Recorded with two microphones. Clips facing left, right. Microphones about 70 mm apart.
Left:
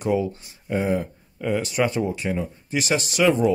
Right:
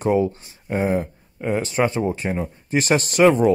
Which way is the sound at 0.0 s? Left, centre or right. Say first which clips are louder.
Right 4 dB; right.